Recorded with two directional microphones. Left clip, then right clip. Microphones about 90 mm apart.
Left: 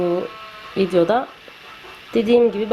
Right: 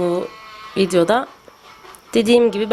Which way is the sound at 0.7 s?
30° right (ahead or behind).